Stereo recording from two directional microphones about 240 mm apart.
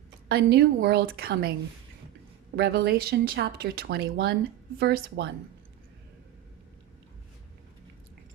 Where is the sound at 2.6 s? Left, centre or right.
Right.